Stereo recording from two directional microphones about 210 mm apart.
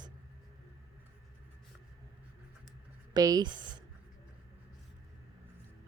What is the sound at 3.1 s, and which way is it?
Speech, 20° right (ahead or behind).